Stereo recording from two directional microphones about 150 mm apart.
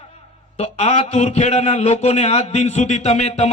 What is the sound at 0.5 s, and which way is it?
A man's voice, 45° left (ahead or behind).